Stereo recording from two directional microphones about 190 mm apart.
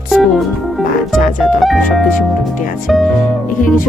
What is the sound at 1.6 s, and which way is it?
Organ, centre (ahead or behind).